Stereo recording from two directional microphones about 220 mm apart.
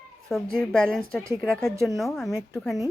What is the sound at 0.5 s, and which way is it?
Speech, 5° left (ahead or behind).